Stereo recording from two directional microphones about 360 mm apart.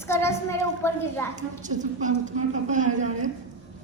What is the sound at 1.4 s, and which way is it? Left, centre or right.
Speech, right.